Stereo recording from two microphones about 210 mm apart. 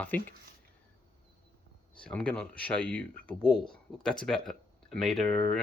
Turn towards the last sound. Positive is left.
turn(degrees=5)  # may be behind; listen again after turning